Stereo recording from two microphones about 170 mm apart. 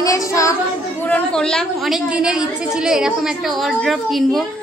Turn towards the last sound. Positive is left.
turn(degrees=0)  # may be behind; listen again after turning